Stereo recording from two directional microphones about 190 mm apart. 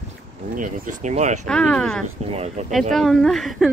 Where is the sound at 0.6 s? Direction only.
40° right (ahead or behind).